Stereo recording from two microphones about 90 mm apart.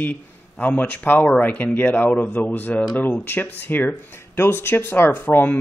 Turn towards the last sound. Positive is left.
turn(degrees=20)  # may be behind; listen again after turning